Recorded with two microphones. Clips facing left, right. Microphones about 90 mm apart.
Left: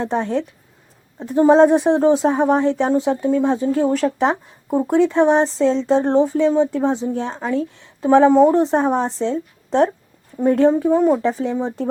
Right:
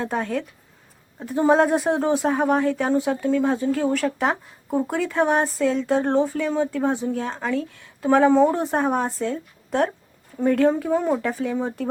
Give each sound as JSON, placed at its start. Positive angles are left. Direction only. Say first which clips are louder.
{"t": 0.0, "sound": "speech", "louder": "left 5 dB", "side_deg": 25}